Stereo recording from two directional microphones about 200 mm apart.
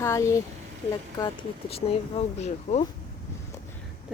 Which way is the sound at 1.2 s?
25° left (ahead or behind).